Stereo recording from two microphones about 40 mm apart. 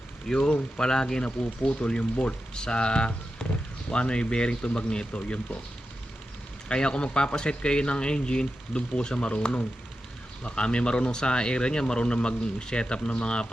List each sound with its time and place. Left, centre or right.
0.3 s speech: left
6.7 s speech: left